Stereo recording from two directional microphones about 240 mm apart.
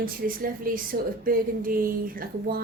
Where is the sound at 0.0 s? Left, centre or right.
Right.